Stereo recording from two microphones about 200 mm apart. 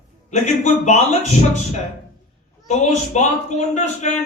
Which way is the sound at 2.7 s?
35° left (ahead or behind).